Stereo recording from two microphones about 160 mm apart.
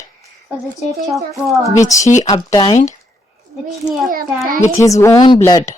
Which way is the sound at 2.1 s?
50° left (ahead or behind).